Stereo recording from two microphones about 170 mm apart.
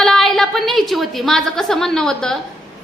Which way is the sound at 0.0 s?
Centre (ahead or behind).